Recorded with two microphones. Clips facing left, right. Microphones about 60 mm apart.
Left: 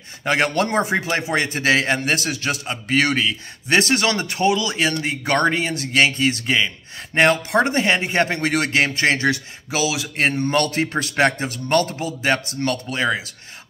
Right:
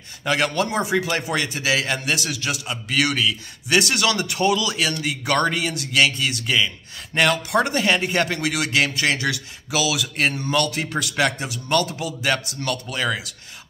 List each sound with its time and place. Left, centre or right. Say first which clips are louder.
0.2 s a man's voice: left 2 dB; left